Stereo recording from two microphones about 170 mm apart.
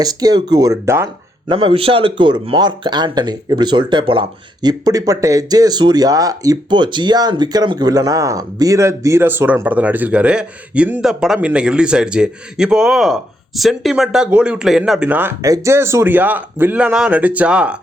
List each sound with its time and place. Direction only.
0.0 s speech: 25° right (ahead or behind)
1.5 s speech: 30° right (ahead or behind); by 17.7 s 5° right (ahead or behind)